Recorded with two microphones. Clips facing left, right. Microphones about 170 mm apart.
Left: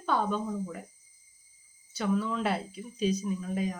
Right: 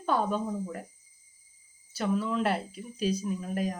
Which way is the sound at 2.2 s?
10° right (ahead or behind).